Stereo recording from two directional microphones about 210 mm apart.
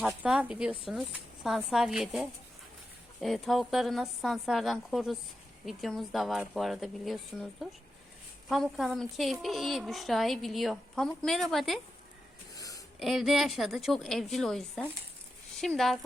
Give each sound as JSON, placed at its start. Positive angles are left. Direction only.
{"t": 0.1, "sound": "a woman's voice", "side_deg": -5}
{"t": 12.5, "sound": "a sound", "side_deg": 15}
{"t": 13.0, "sound": "a woman's voice", "side_deg": 0}